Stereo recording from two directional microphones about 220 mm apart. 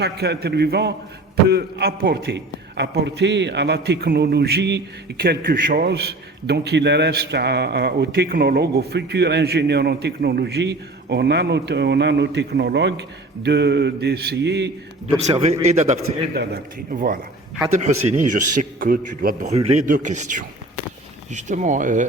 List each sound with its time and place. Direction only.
0.0 s a man's voice: 45° right (ahead or behind)
15.3 s speech: 30° right (ahead or behind)
16.3 s a man's voice: 40° right (ahead or behind)